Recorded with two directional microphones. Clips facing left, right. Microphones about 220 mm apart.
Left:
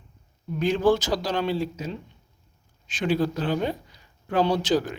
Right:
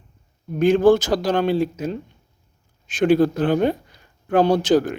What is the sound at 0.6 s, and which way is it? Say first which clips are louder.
Speech: right 7 dB; 50° right (ahead or behind).